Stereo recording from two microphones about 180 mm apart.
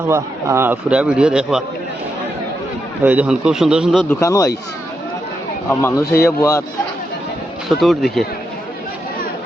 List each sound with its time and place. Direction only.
0.1 s a man's voice: 15° right (ahead or behind)
3.0 s a man's voice: 10° right (ahead or behind)
4.1 s a man's voice: 15° left (ahead or behind)
5.6 s a man's voice: 15° left (ahead or behind)
7.7 s a man's voice: centre (ahead or behind)